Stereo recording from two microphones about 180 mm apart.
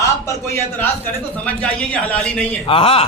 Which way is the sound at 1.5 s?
5° left (ahead or behind).